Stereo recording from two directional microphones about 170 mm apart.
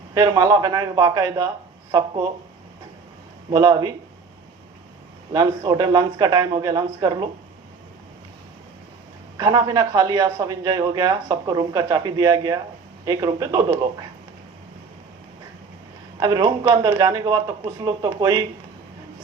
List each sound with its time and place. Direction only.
0.1 s a man's voice: 20° right (ahead or behind)
3.5 s a man's voice: 20° right (ahead or behind)
5.3 s a man's voice: 20° right (ahead or behind)
9.4 s a man's voice: 20° right (ahead or behind)
16.2 s a man's voice: 25° right (ahead or behind)